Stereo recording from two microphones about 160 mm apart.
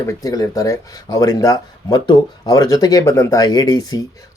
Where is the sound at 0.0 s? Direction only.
20° left (ahead or behind).